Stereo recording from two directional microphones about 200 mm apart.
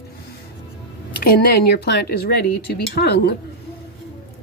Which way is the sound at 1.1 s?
45° left (ahead or behind).